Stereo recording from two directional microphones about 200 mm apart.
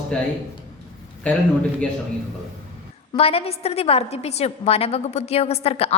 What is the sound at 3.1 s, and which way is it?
A woman's voice, 30° left (ahead or behind).